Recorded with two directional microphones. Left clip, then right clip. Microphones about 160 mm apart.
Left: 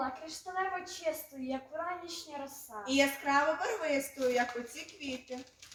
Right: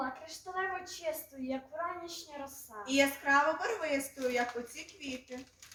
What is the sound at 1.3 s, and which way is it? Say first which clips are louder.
Speech: even; 15° right (ahead or behind).